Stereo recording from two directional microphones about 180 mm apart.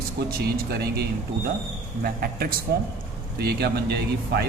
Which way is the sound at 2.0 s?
55° right (ahead or behind).